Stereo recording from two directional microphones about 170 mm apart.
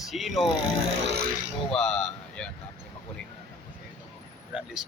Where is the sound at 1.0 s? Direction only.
75° right (ahead or behind).